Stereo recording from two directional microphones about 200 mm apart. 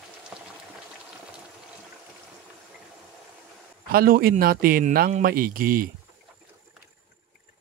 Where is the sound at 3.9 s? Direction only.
45° right (ahead or behind).